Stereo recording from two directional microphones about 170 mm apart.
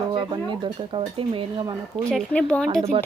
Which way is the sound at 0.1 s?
30° right (ahead or behind).